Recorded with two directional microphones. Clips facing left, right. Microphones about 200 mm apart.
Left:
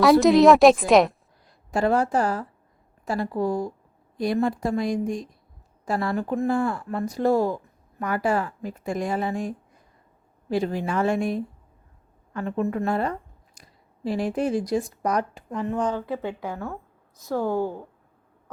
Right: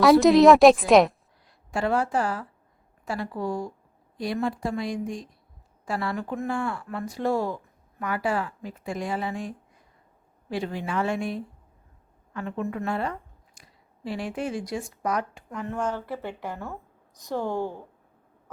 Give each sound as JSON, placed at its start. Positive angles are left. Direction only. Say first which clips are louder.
{"t": 0.0, "sound": "a woman's voice", "louder": "even", "side_deg": 0}
{"t": 1.7, "sound": "speech", "louder": "left 3 dB", "side_deg": 40}
{"t": 10.5, "sound": "speech", "louder": "left 4 dB", "side_deg": 40}
{"t": 15.6, "sound": "speech", "louder": "left 4 dB", "side_deg": 15}
{"t": 16.5, "sound": "a woman's voice", "louder": "left 3 dB", "side_deg": -15}
{"t": 17.3, "sound": "speech", "louder": "left 4 dB", "side_deg": 10}